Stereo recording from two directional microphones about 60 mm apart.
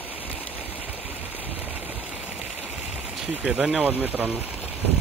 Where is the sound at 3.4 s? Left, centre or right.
Centre.